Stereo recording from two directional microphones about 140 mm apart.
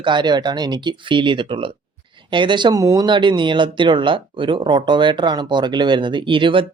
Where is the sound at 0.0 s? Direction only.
35° right (ahead or behind).